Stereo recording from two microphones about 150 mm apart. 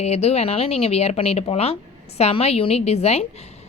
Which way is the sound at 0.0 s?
45° left (ahead or behind).